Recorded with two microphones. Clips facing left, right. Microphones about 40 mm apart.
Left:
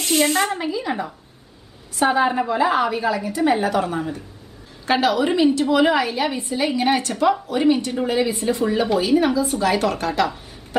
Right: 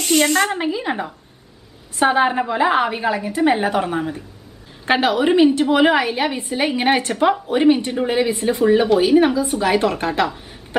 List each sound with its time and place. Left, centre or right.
0.5 s a woman's voice: right